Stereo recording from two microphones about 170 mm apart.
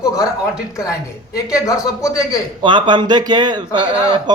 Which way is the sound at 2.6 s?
25° right (ahead or behind).